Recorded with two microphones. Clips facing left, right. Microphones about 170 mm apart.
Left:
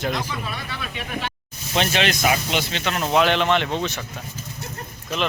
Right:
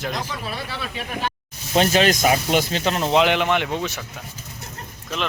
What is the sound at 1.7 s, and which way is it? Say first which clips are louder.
Speech: right 4 dB; 40° right (ahead or behind).